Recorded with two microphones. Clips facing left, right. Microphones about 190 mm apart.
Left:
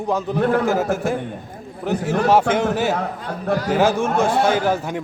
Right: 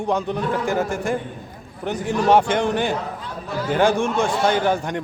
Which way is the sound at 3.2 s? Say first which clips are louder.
Left 6 dB; 50° left (ahead or behind).